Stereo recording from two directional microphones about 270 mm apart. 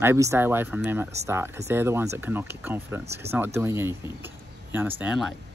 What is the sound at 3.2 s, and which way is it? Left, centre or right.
Speech, right.